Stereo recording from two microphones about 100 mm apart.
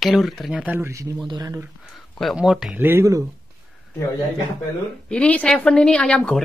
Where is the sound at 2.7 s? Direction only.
20° right (ahead or behind).